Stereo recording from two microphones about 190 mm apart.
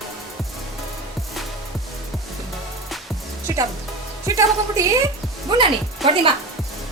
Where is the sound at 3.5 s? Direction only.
15° right (ahead or behind).